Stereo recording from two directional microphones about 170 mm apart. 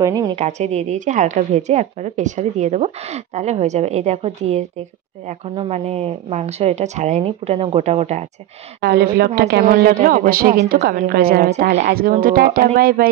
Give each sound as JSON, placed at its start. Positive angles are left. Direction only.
{"t": 0.0, "sound": "a woman's voice", "side_deg": -20}
{"t": 0.4, "sound": "a woman's voice", "side_deg": -40}
{"t": 8.8, "sound": "a woman's voice", "side_deg": -65}
{"t": 9.7, "sound": "a woman's voice", "side_deg": -55}